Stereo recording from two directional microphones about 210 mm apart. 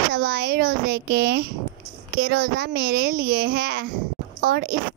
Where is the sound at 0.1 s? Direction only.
45° right (ahead or behind).